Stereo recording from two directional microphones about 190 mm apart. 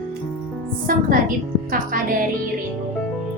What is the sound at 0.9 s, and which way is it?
A woman's voice, 45° right (ahead or behind).